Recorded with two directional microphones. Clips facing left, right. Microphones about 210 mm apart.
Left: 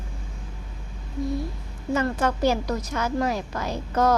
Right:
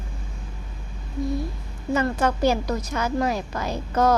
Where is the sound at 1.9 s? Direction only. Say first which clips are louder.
Right 1 dB; 15° right (ahead or behind).